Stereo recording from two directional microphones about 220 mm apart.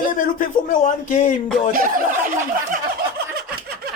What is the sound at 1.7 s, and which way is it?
Speech, 40° right (ahead or behind).